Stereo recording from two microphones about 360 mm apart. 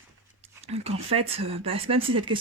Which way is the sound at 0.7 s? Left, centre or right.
Centre.